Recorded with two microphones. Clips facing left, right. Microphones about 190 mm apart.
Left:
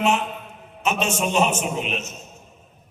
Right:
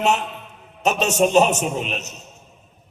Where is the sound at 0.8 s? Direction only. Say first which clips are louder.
Right 5 dB; 40° right (ahead or behind).